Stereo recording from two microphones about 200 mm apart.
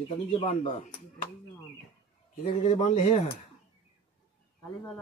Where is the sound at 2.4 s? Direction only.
35° left (ahead or behind).